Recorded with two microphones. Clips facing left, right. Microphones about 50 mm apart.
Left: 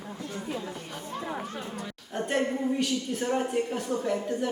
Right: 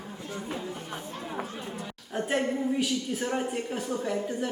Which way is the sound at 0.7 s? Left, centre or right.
Right.